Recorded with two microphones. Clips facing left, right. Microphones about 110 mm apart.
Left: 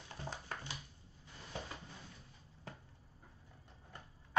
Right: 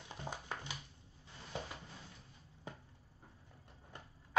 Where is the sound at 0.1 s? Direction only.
15° right (ahead or behind).